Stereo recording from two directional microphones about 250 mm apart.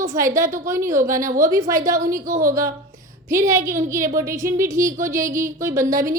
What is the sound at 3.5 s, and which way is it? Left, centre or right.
A woman's voice, centre.